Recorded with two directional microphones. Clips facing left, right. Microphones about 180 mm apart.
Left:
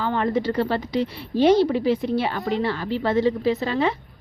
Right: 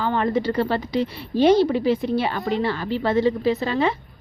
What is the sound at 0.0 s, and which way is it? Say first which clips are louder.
A woman's voice: right 1 dB; 30° right (ahead or behind).